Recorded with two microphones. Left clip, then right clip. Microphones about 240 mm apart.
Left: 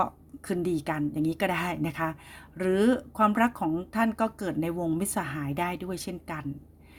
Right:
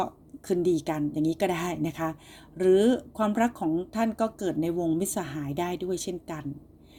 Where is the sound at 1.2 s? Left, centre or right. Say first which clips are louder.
Right 2 dB; left.